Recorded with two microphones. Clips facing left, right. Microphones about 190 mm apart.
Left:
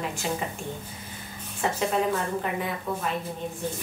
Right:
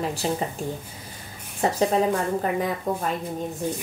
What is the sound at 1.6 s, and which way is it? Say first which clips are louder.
A woman's voice: right 4 dB; 40° right (ahead or behind).